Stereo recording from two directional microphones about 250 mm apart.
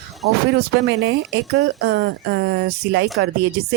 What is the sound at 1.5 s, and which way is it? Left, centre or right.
Speech, right.